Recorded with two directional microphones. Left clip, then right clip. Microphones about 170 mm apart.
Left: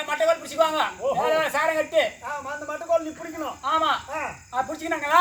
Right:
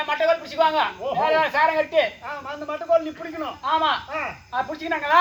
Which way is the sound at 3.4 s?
10° left (ahead or behind).